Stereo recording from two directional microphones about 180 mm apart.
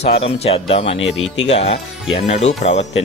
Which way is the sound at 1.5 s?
35° left (ahead or behind).